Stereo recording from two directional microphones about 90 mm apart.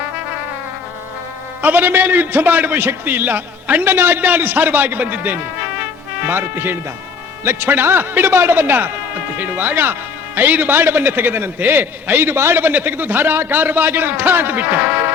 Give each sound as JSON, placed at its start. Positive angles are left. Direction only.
{"t": 1.6, "sound": "a man's voice", "side_deg": -20}